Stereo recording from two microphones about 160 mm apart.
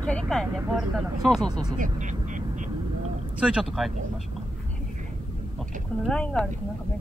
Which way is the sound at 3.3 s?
5° right (ahead or behind).